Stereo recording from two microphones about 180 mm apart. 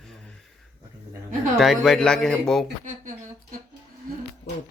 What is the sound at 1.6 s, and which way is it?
Speech, centre (ahead or behind).